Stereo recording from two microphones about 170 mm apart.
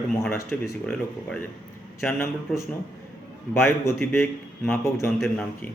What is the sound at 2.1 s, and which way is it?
A man's voice, 15° left (ahead or behind).